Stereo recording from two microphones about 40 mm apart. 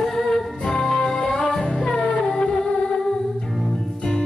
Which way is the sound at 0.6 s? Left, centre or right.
Left.